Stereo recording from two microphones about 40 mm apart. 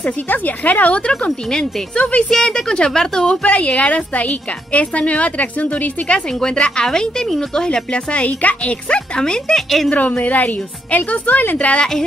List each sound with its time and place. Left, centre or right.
0.3 s a woman's voice: left
2.2 s speech: centre
3.4 s a woman's voice: left
6.1 s speech: left
9.2 s speech: centre
9.6 s a woman's voice: centre
9.9 s a woman's voice: left
11.5 s a woman's voice: left